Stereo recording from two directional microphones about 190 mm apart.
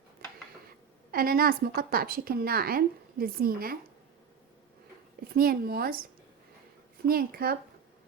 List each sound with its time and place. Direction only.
1.1 s a woman's voice: 50° right (ahead or behind)
5.3 s a woman's voice: 50° right (ahead or behind)
7.1 s a woman's voice: 50° right (ahead or behind)